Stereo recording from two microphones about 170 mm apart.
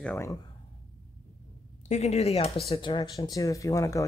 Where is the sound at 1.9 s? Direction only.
40° left (ahead or behind).